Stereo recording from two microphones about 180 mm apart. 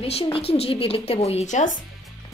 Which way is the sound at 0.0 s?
30° left (ahead or behind).